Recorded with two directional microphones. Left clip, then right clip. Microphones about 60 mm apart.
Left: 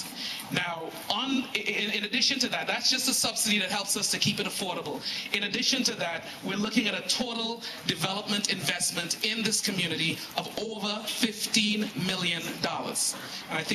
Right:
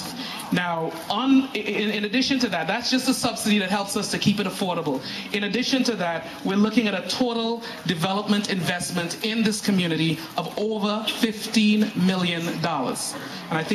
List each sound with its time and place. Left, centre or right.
0.6 s a man's voice: left